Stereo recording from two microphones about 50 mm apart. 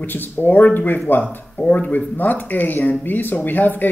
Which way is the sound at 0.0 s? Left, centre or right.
Left.